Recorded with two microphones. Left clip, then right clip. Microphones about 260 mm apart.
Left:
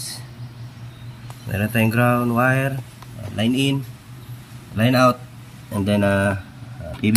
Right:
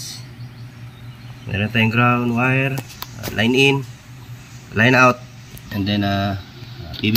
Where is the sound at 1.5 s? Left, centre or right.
Centre.